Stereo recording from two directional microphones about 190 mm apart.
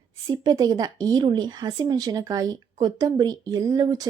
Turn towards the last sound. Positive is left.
turn(degrees=-20)  # may be behind; listen again after turning